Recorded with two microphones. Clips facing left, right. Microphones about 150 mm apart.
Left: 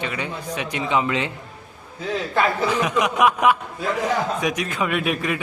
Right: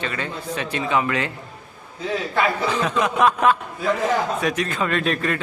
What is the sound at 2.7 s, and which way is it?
Speech, 15° left (ahead or behind).